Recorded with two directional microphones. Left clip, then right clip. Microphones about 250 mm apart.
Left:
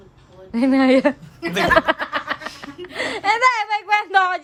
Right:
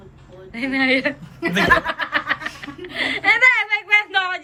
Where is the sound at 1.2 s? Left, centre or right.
Centre.